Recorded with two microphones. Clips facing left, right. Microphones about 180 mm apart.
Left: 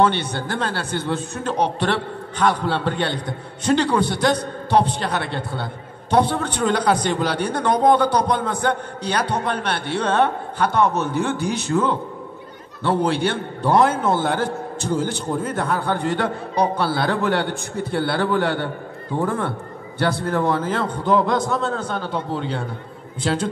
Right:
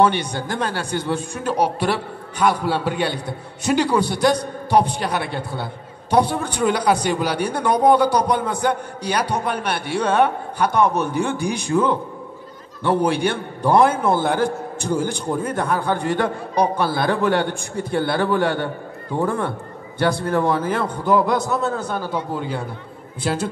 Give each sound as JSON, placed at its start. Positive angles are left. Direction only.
{"t": 0.0, "sound": "a man's voice", "side_deg": -15}